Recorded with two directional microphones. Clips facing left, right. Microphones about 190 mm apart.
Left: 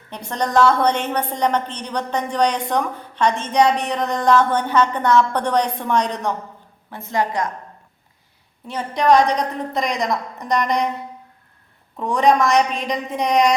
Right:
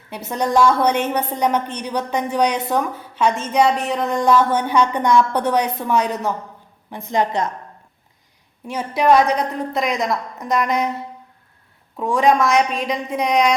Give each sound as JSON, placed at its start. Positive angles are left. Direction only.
{"t": 0.1, "sound": "a woman's voice", "side_deg": -5}
{"t": 6.9, "sound": "a woman's voice", "side_deg": -20}
{"t": 8.6, "sound": "a woman's voice", "side_deg": -10}
{"t": 11.9, "sound": "a woman's voice", "side_deg": 0}